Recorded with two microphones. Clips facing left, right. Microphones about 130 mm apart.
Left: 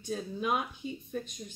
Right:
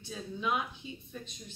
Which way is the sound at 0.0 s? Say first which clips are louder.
Left 3 dB; 45° left (ahead or behind).